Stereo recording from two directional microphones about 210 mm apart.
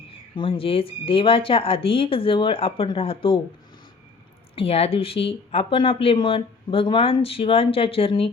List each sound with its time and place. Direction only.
0.3 s speech: 25° left (ahead or behind)
4.5 s speech: 30° left (ahead or behind)